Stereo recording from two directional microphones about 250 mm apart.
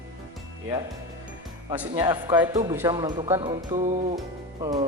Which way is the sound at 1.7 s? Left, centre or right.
Centre.